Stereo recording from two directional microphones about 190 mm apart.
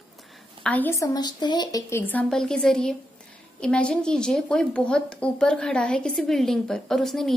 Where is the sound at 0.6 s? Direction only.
10° left (ahead or behind).